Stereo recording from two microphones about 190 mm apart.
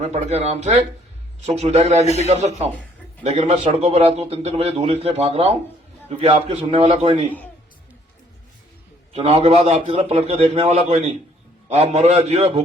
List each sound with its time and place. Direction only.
0.0 s a man's voice: 35° right (ahead or behind)
9.1 s a man's voice: 35° right (ahead or behind)